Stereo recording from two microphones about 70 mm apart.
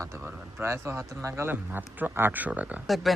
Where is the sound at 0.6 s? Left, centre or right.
Right.